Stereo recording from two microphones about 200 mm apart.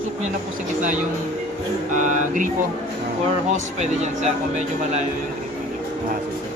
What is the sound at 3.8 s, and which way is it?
Speech, 35° right (ahead or behind).